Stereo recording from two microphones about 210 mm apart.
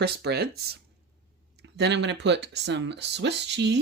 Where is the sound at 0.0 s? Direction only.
50° right (ahead or behind).